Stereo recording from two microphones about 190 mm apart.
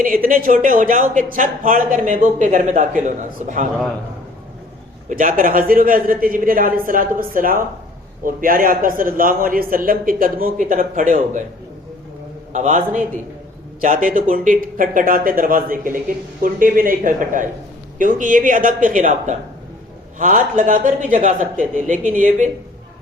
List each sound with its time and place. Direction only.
0.0 s speech: 45° right (ahead or behind)
5.0 s speech: 45° right (ahead or behind)
12.5 s a man's voice: 40° right (ahead or behind)